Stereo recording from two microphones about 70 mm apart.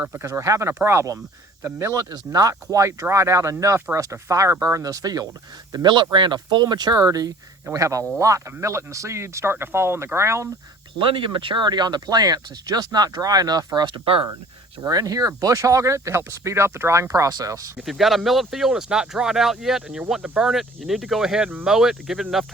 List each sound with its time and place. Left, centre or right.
0.0 s speech: right
0.3 s speech: right
1.6 s speech: right
2.0 s speech: right
5.7 s speech: right
7.0 s speech: right
11.5 s speech: right
14.8 s speech: right
17.8 s speech: centre
20.5 s speech: centre